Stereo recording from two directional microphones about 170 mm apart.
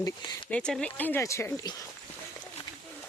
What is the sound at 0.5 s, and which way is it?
Speech, 5° left (ahead or behind).